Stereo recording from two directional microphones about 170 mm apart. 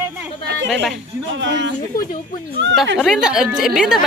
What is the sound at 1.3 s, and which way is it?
Speech, 90° right.